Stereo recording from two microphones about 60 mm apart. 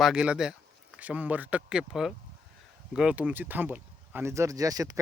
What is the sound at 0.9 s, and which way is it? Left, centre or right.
Speech, right.